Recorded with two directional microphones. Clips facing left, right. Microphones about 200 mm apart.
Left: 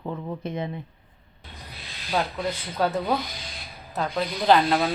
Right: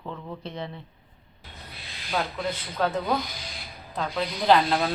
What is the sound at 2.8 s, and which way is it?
A woman's voice, 10° left (ahead or behind).